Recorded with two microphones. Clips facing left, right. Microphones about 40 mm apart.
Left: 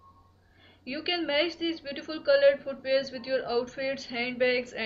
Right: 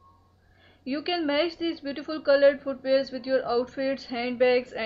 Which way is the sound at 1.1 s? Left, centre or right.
Centre.